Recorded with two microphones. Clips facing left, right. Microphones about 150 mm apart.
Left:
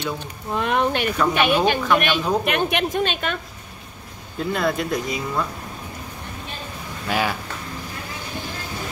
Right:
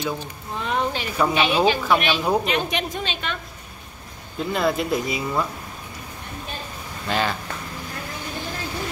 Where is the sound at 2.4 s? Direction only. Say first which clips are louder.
Left 3 dB; 60° left (ahead or behind).